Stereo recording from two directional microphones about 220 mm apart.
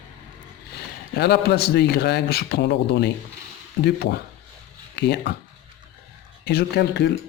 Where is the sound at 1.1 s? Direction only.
50° left (ahead or behind).